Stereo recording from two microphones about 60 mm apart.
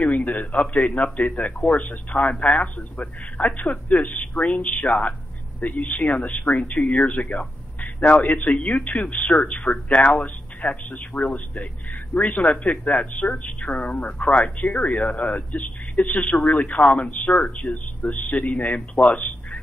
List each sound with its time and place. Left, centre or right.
0.0 s a man's voice: left
9.0 s speech: left
19.0 s telephone: left